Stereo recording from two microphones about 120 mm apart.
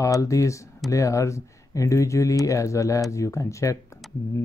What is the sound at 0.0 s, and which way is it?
Speech, 25° left (ahead or behind).